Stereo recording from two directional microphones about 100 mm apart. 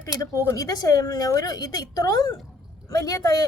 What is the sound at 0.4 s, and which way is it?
A woman's voice, 35° left (ahead or behind).